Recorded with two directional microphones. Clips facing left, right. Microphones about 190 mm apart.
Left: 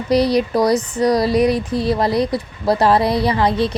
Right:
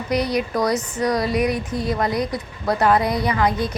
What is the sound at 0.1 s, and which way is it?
Speech, 35° left (ahead or behind).